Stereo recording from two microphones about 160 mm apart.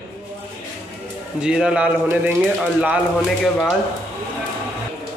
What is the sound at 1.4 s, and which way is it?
Speech, 5° right (ahead or behind).